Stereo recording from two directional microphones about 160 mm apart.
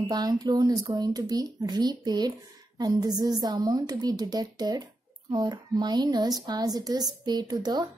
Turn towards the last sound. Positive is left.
turn(degrees=-25)  # may be behind; listen again after turning